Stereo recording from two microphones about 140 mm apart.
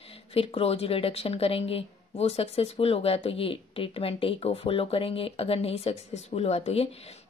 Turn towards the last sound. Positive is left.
turn(degrees=50)  # may be behind; listen again after turning